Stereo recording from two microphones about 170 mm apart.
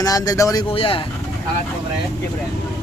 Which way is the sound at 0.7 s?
30° left (ahead or behind).